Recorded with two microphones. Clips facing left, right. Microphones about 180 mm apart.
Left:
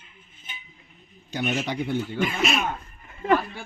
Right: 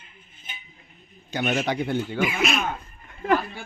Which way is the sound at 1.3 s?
70° right (ahead or behind).